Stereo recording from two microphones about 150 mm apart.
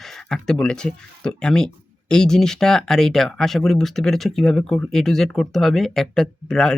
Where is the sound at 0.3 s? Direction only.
5° left (ahead or behind).